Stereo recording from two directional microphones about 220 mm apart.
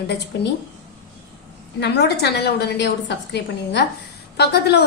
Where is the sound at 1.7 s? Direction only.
50° left (ahead or behind).